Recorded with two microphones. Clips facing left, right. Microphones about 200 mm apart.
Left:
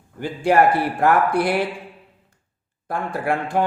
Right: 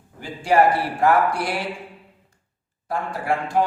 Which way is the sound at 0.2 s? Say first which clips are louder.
Left 1 dB; 60° left (ahead or behind).